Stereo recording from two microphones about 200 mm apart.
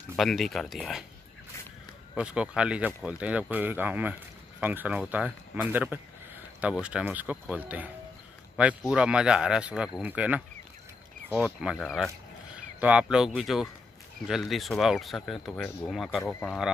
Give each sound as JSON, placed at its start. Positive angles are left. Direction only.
{"t": 0.1, "sound": "speech", "side_deg": 0}
{"t": 2.1, "sound": "speech", "side_deg": -5}